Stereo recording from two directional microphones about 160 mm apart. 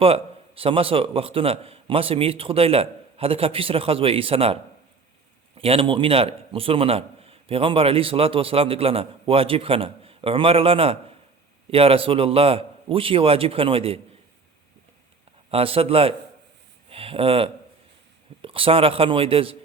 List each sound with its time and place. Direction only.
0.0 s a man's voice: 35° right (ahead or behind)
5.5 s a man's voice: 35° right (ahead or behind)
15.4 s a man's voice: 35° right (ahead or behind)